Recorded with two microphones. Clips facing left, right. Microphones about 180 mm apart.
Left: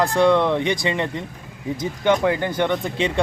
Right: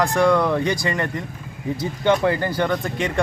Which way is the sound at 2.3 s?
Centre (ahead or behind).